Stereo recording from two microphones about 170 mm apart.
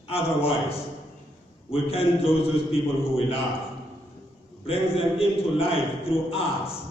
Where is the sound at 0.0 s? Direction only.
35° left (ahead or behind).